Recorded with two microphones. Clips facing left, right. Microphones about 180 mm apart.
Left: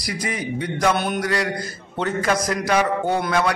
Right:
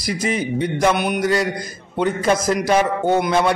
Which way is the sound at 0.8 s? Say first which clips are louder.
Right 2 dB; 20° right (ahead or behind).